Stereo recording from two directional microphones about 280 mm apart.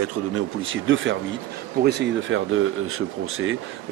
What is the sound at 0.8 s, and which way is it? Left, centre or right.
A man's voice, right.